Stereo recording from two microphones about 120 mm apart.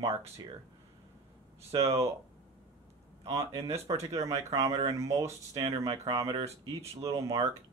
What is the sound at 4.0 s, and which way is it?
Speech, 25° right (ahead or behind).